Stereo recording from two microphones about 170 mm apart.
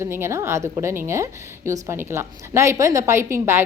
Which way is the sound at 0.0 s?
15° right (ahead or behind).